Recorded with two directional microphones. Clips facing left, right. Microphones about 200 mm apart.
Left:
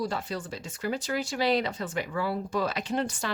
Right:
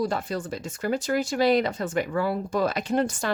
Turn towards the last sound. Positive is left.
turn(degrees=-45)  # may be behind; listen again after turning